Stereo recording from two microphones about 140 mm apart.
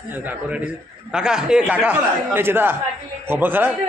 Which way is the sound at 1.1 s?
5° right (ahead or behind).